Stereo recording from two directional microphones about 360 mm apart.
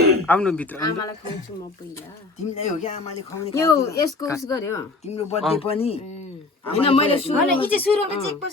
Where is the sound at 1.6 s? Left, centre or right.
Centre.